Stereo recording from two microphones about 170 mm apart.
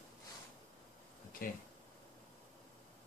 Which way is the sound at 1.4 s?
55° left (ahead or behind).